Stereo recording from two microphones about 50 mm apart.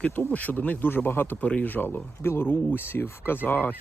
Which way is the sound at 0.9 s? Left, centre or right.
Left.